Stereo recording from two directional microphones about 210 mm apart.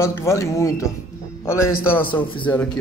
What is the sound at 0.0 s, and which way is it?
A man's voice, 15° left (ahead or behind).